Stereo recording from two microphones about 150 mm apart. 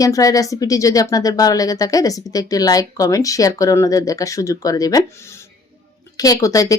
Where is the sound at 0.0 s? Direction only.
25° left (ahead or behind).